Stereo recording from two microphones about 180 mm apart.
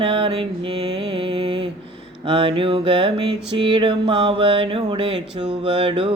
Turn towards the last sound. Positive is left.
turn(degrees=-30)  # may be behind; listen again after turning